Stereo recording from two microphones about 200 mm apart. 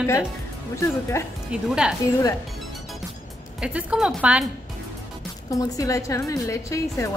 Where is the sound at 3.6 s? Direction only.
5° right (ahead or behind).